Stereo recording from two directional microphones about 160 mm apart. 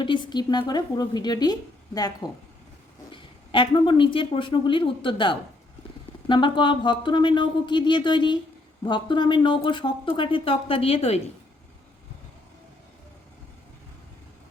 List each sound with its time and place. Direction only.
0.0 s speech: 30° left (ahead or behind)